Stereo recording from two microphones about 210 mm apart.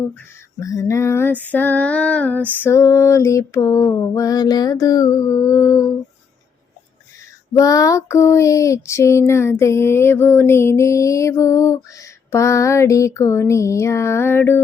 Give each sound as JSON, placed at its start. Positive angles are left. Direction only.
{"t": 0.6, "sound": "female singing", "side_deg": 15}
{"t": 7.5, "sound": "female singing", "side_deg": 15}